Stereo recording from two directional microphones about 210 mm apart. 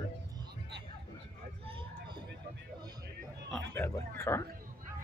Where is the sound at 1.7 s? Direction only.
25° right (ahead or behind).